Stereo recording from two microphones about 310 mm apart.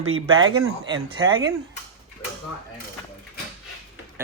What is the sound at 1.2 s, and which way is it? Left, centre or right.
Speech, centre.